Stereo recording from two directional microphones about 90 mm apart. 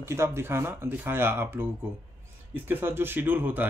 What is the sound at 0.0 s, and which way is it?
Speech, 30° right (ahead or behind).